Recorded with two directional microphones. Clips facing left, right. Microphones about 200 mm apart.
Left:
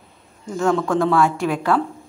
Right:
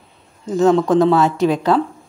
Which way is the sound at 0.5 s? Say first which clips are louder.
Right 6 dB; 20° right (ahead or behind).